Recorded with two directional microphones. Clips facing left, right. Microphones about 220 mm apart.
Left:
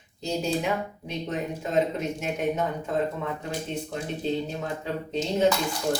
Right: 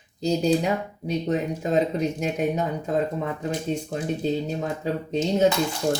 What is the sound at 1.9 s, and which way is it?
Speech, 35° right (ahead or behind).